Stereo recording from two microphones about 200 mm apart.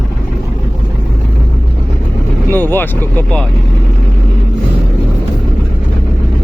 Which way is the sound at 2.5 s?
10° left (ahead or behind).